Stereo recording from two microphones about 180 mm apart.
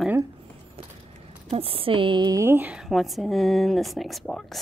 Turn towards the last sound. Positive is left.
turn(degrees=0)  # may be behind; listen again after turning